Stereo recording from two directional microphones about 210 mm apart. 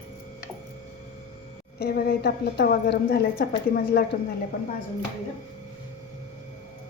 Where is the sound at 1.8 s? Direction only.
45° left (ahead or behind).